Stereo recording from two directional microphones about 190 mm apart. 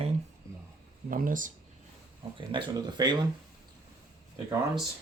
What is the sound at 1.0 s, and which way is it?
Speech, 45° right (ahead or behind).